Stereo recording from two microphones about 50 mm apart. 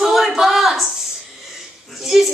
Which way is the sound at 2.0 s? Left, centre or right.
Centre.